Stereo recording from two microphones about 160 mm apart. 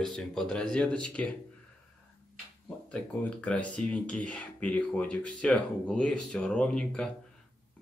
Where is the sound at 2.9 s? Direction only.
10° left (ahead or behind).